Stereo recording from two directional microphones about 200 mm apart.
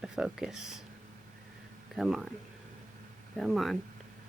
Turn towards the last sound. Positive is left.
turn(degrees=0)  # may be behind; listen again after turning